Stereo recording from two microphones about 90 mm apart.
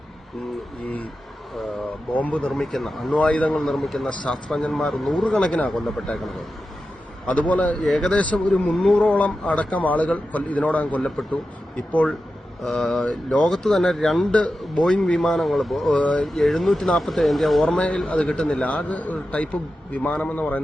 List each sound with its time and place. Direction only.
2.1 s speech: 15° left (ahead or behind)
2.6 s speech: centre (ahead or behind)
3.1 s speech: 15° left (ahead or behind)
3.5 s speech: 5° left (ahead or behind)
5.7 s speech: centre (ahead or behind)
7.3 s speech: 15° left (ahead or behind)
9.0 s speech: 15° left (ahead or behind)
12.6 s speech: 5° left (ahead or behind)
16.0 s speech: 15° left (ahead or behind)
16.2 s speech: 5° left (ahead or behind)